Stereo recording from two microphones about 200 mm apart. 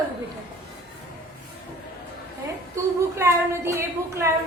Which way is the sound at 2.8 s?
15° right (ahead or behind).